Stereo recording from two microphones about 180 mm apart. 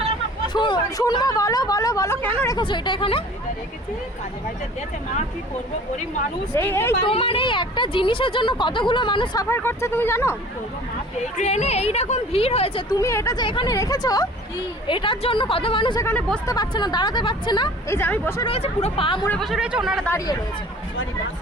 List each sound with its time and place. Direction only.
0.5 s speech: 25° left (ahead or behind)
6.5 s speech: 15° left (ahead or behind)
7.0 s speech: 30° left (ahead or behind); by 10.3 s 15° left (ahead or behind)
11.3 s a woman's voice: 40° left (ahead or behind)
12.9 s speech: 15° left (ahead or behind)
16.0 s speech: 5° left (ahead or behind)
16.5 s speech: 25° left (ahead or behind)
18.4 s speech: 35° left (ahead or behind)
19.3 s speech: centre (ahead or behind)
20.1 s speech: 20° left (ahead or behind)